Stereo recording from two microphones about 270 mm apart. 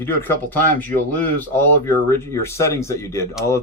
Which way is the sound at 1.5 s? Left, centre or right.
Centre.